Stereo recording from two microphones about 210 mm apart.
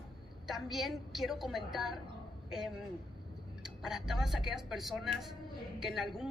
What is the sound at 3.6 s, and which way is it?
A woman's voice, centre (ahead or behind).